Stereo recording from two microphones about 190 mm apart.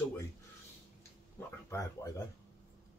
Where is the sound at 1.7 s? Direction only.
15° left (ahead or behind).